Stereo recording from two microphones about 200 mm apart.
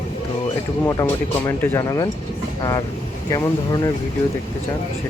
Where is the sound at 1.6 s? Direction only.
15° left (ahead or behind).